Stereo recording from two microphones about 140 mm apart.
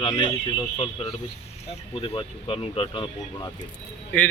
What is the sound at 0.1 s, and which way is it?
Speech, 30° left (ahead or behind).